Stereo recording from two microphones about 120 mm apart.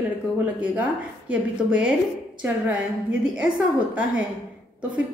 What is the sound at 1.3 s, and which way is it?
A woman's voice, 10° right (ahead or behind).